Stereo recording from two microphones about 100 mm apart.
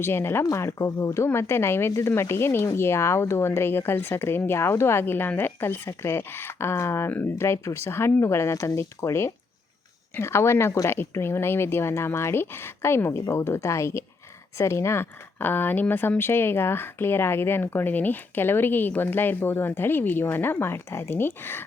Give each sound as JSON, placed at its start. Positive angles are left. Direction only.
{"t": 0.0, "sound": "speech", "side_deg": 25}